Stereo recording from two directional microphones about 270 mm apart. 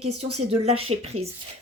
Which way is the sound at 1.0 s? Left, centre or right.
Right.